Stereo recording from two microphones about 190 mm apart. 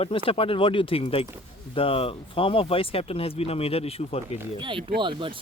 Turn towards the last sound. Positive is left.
turn(degrees=-25)  # may be behind; listen again after turning